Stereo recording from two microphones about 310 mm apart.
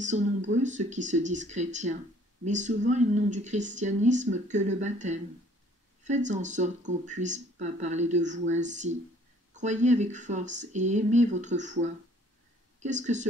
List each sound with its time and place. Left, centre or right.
0.1 s speech: right